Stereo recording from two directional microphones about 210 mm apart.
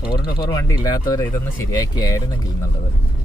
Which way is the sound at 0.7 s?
15° left (ahead or behind).